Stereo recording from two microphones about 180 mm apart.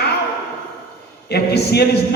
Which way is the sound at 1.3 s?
65° left (ahead or behind).